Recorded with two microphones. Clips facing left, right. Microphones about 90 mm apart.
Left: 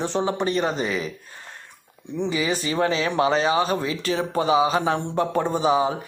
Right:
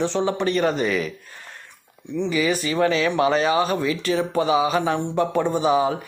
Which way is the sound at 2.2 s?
30° left (ahead or behind).